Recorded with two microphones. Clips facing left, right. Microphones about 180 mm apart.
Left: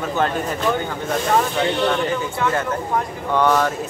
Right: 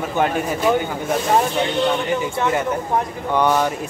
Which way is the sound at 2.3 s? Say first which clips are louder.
Right 1 dB; 20° right (ahead or behind).